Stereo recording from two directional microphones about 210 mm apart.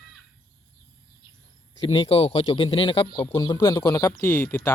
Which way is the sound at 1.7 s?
25° left (ahead or behind).